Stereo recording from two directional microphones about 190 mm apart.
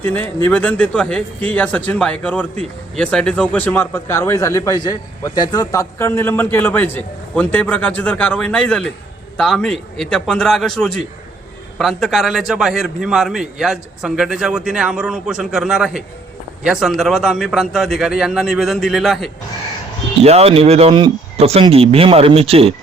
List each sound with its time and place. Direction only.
0.0 s a man's voice: 10° left (ahead or behind)
20.2 s speech: 35° right (ahead or behind)